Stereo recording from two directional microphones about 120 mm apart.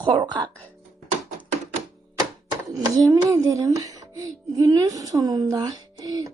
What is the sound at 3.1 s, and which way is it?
A woman's voice, 25° right (ahead or behind).